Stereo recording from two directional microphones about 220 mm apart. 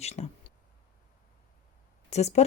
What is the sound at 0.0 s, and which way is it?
Speech, 30° left (ahead or behind).